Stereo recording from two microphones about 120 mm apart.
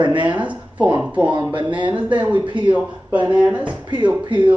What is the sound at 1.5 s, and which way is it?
Speech, 45° right (ahead or behind).